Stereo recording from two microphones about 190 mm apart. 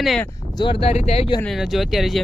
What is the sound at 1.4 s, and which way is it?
Speech, centre (ahead or behind).